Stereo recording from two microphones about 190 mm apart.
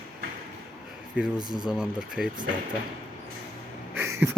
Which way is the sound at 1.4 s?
20° right (ahead or behind).